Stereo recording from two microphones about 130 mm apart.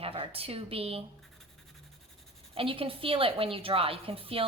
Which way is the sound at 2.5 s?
45° right (ahead or behind).